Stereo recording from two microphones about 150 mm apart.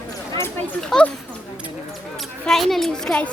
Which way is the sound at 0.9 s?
5° left (ahead or behind).